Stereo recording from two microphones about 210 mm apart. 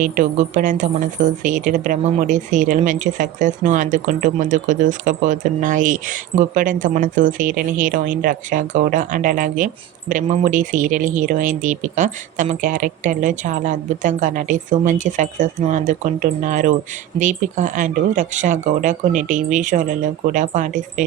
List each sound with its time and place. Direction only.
0.0 s speech: 35° right (ahead or behind)